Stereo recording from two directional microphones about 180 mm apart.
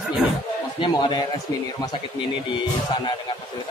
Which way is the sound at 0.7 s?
25° left (ahead or behind).